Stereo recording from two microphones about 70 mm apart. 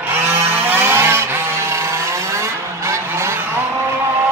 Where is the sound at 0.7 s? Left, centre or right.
Right.